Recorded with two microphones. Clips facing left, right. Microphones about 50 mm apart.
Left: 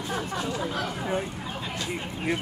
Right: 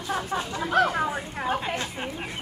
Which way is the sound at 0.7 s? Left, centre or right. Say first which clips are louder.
Right 6 dB; right.